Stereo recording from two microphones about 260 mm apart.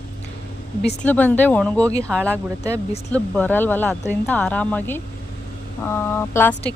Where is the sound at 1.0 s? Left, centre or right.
Centre.